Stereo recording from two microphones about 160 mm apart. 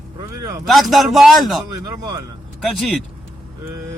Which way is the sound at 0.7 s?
Centre (ahead or behind).